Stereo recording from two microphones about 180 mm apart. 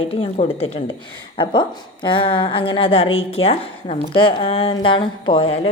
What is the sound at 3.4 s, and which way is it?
Speech, 90° left.